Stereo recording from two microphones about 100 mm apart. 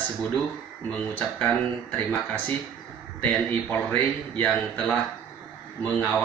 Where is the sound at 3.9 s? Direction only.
15° left (ahead or behind).